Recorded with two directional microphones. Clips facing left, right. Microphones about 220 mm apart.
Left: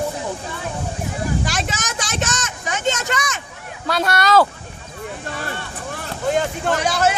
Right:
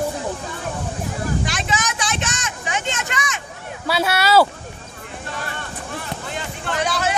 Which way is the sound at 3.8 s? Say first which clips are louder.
Left 1 dB; 5° right (ahead or behind).